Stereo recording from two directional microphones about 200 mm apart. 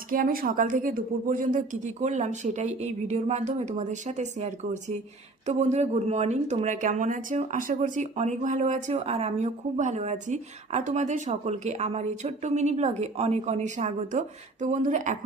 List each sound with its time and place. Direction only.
0.1 s speech: 45° right (ahead or behind)